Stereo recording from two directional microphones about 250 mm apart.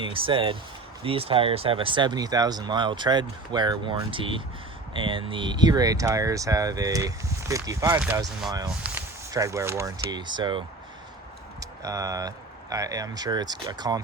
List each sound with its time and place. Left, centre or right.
0.0 s speech: right
11.6 s speech: centre